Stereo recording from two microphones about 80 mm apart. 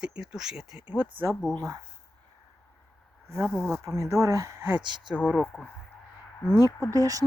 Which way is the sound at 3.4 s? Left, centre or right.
Left.